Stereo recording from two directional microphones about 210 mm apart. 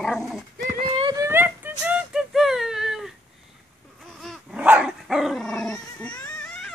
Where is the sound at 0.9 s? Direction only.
25° right (ahead or behind); by 3.1 s centre (ahead or behind).